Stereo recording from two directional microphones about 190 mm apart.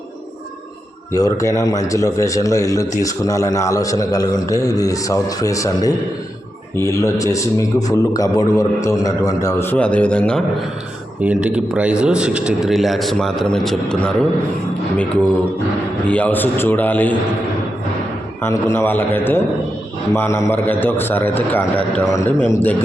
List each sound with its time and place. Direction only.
1.1 s a man's voice: 15° left (ahead or behind)
11.2 s a man's voice: 5° right (ahead or behind)
16.0 s a man's voice: 5° left (ahead or behind)
18.4 s a man's voice: 15° left (ahead or behind)